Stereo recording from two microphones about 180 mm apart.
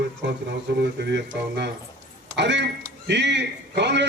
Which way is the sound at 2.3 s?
70° right (ahead or behind).